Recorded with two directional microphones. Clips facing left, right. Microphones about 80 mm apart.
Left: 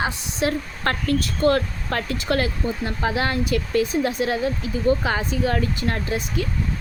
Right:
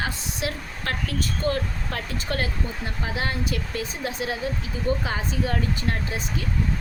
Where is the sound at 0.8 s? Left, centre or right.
Left.